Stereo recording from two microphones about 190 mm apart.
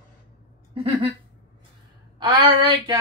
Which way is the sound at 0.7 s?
30° right (ahead or behind).